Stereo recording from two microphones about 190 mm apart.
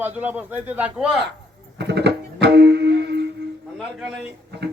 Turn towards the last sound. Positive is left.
turn(degrees=-55)  # may be behind; listen again after turning